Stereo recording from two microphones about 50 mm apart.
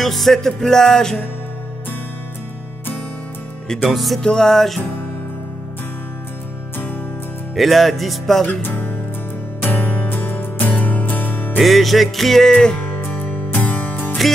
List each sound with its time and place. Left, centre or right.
0.0 s music: centre
3.9 s music: centre
4.2 s music: centre
7.5 s music: centre
8.6 s speech: left
9.6 s music: left
11.6 s music: centre
12.5 s speech: centre
12.8 s music: left